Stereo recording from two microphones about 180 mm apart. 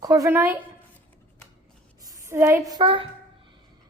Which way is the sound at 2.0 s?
15° right (ahead or behind).